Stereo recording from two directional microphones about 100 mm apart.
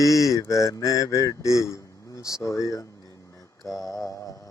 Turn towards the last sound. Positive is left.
turn(degrees=35)  # may be behind; listen again after turning